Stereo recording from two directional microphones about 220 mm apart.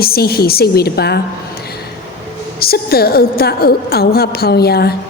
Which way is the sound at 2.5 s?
45° left (ahead or behind).